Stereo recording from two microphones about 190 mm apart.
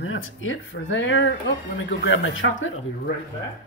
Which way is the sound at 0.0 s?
90° left.